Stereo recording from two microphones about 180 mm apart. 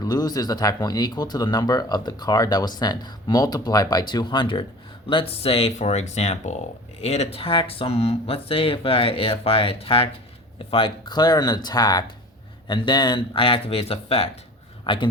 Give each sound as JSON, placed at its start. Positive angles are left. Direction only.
{"t": 0.0, "sound": "speech", "side_deg": 20}